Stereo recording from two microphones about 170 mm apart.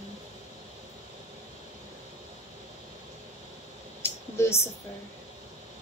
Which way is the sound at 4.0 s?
15° left (ahead or behind).